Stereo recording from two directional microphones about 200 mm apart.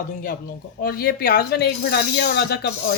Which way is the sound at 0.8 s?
50° left (ahead or behind).